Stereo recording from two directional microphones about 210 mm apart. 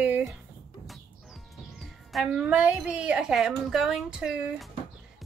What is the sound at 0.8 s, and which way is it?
Music, centre (ahead or behind).